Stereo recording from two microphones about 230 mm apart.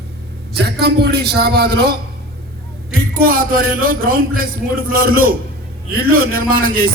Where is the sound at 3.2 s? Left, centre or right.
Right.